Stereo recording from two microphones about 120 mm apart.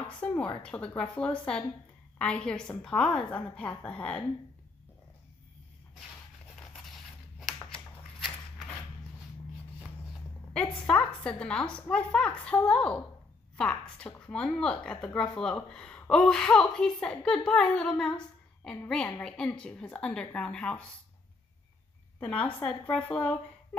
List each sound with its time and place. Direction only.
0.2 s a woman's voice: 10° left (ahead or behind)
6.5 s scissors: centre (ahead or behind)
10.5 s a woman's voice: 10° left (ahead or behind)
22.2 s a woman's voice: 10° left (ahead or behind)